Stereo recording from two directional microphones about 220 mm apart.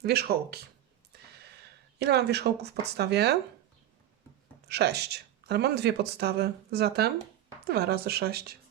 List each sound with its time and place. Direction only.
0.0 s speech: 45° right (ahead or behind)
1.1 s a sound: 45° right (ahead or behind)
4.7 s speech: 50° right (ahead or behind)